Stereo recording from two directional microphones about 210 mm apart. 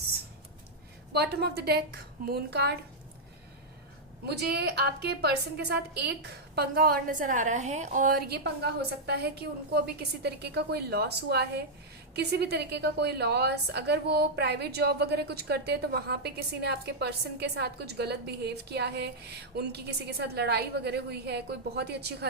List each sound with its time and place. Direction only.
1.1 s a woman's voice: 50° right (ahead or behind)
4.3 s a woman's voice: 50° right (ahead or behind)